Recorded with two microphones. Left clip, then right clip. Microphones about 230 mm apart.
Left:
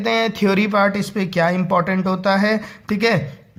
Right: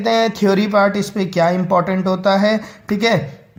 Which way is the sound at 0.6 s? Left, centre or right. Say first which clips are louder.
Right 1 dB; left.